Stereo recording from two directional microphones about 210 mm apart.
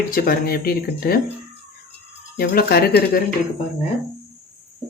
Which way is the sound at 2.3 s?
45° left (ahead or behind).